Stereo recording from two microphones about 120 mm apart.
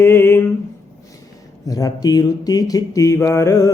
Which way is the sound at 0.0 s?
20° left (ahead or behind).